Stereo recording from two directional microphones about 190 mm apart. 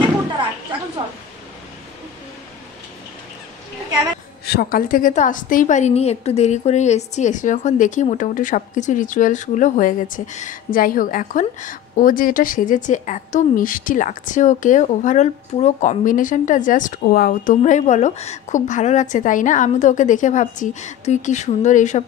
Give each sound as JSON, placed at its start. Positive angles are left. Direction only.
{"t": 4.5, "sound": "a woman's voice", "side_deg": 55}